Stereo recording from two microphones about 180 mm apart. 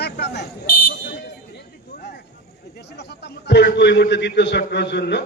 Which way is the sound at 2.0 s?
65° left (ahead or behind).